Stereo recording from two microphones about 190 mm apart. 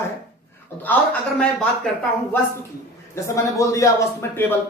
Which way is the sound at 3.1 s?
15° left (ahead or behind).